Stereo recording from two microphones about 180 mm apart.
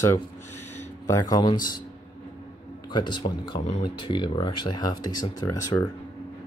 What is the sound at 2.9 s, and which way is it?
A man's voice, 25° left (ahead or behind).